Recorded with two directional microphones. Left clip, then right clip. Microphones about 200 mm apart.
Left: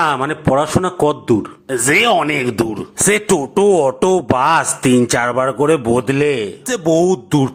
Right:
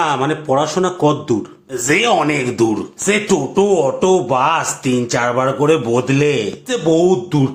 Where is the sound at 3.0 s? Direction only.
50° left (ahead or behind); by 6.5 s 35° left (ahead or behind).